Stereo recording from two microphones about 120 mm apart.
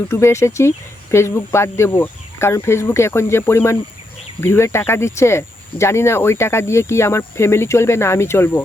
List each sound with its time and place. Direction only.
0.1 s speech: 25° left (ahead or behind)